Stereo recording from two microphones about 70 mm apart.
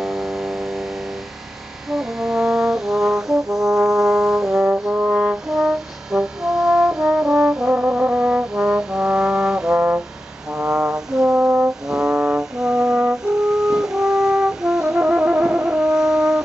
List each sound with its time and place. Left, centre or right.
0.0 s a sound: centre
1.9 s brass instrument: centre
9.8 s brass instrument: right
10.6 s brass instrument: centre